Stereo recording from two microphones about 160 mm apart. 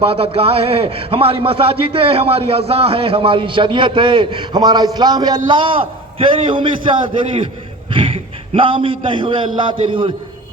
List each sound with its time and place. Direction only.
0.0 s a man's voice: 35° right (ahead or behind)